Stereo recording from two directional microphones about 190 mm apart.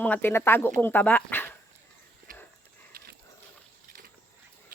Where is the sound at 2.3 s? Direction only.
45° right (ahead or behind).